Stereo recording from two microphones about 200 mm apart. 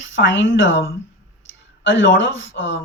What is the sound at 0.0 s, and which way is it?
Speech, 70° left (ahead or behind).